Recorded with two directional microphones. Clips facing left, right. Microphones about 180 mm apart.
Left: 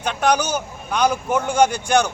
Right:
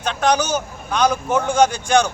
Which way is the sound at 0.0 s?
10° left (ahead or behind).